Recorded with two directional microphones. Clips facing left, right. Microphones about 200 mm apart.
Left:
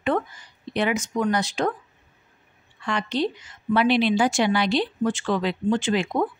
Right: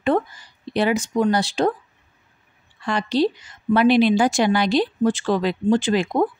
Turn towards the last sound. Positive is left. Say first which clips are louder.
# right 4 dB
turn(degrees=-40)  # may be behind; listen again after turning